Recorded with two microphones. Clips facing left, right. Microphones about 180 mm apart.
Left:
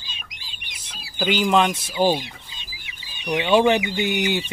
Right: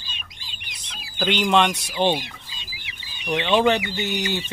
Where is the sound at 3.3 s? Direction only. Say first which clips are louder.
Left 2 dB; 15° left (ahead or behind).